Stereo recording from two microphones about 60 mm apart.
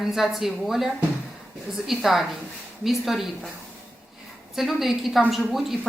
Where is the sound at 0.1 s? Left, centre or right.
Centre.